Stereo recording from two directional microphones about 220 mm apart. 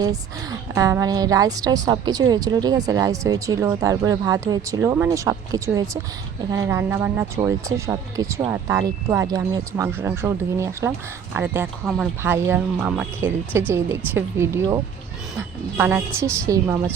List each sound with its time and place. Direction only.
0.7 s a woman's voice: 15° right (ahead or behind)